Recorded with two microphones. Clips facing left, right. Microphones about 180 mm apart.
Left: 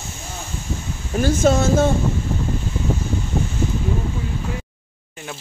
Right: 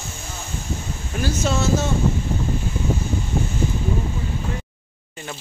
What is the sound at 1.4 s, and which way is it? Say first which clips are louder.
Speech: left 5 dB; 50° left (ahead or behind).